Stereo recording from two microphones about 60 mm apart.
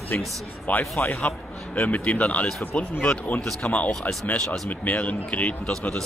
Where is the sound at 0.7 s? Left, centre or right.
Left.